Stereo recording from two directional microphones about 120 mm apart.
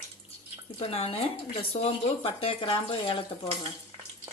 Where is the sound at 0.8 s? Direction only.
60° left (ahead or behind).